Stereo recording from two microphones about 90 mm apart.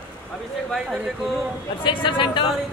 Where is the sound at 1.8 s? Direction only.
65° left (ahead or behind).